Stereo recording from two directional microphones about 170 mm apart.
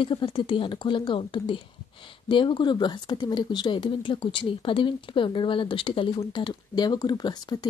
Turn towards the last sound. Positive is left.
turn(degrees=25)  # may be behind; listen again after turning